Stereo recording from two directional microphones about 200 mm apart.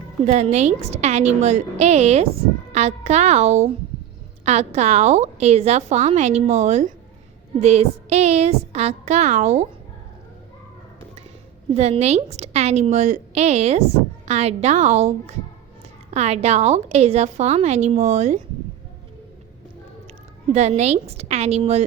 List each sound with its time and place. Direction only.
0.3 s a woman's voice: 35° right (ahead or behind)
11.7 s a woman's voice: 30° right (ahead or behind)
20.5 s a woman's voice: 35° right (ahead or behind)